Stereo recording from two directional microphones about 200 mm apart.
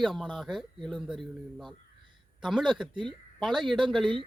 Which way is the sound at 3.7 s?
25° right (ahead or behind).